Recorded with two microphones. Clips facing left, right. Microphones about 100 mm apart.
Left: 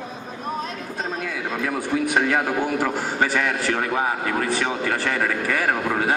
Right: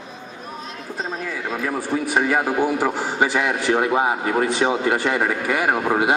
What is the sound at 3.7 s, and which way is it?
Speech, 20° right (ahead or behind).